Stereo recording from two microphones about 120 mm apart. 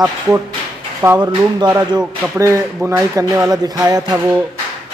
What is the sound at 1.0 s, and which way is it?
Speech, 20° right (ahead or behind).